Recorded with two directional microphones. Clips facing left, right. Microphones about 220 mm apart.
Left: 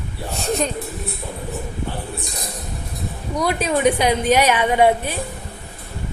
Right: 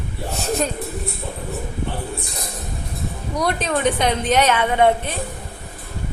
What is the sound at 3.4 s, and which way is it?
A woman's voice, 5° left (ahead or behind).